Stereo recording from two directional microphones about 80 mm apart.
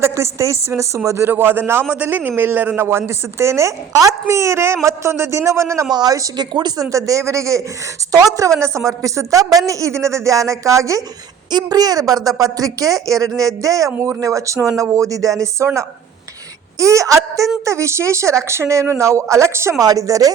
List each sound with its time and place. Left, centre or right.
0.0 s a woman's voice: right
5.9 s speech: right
6.3 s speech: right
6.9 s a woman's voice: right
11.5 s a woman's voice: right
19.8 s speech: right